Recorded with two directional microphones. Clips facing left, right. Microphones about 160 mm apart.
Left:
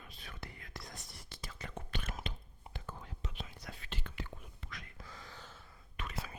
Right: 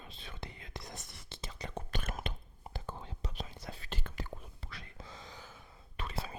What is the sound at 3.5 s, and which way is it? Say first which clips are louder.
Whispering: right 3 dB; 25° right (ahead or behind).